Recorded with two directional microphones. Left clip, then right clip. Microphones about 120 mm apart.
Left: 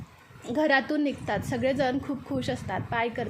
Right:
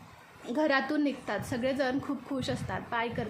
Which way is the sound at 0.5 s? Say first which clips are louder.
Left 4 dB; 20° left (ahead or behind).